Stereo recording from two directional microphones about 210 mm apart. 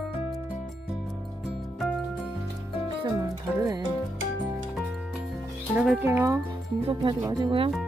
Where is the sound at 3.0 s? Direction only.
15° right (ahead or behind).